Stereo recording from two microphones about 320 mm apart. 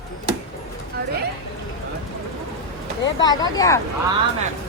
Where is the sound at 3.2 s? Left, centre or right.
Centre.